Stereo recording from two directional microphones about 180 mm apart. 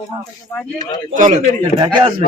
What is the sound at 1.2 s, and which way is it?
Speech, 45° right (ahead or behind).